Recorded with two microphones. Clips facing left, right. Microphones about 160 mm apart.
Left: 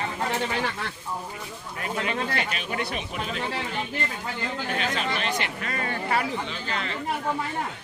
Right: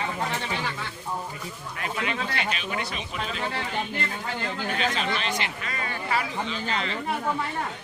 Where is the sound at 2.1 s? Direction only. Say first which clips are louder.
Left 1 dB; 45° left (ahead or behind).